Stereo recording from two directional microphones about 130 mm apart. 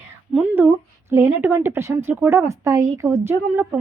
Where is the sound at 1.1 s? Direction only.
15° right (ahead or behind).